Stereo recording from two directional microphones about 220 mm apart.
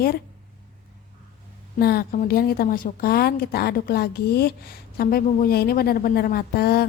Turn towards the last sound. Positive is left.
turn(degrees=45)  # may be behind; listen again after turning